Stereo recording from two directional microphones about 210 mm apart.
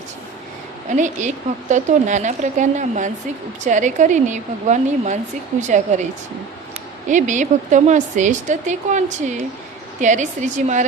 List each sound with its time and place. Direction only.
0.9 s speech: 35° right (ahead or behind)
7.1 s speech: 35° right (ahead or behind)